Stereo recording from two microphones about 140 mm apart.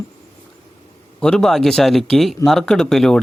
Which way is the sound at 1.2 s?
5° left (ahead or behind).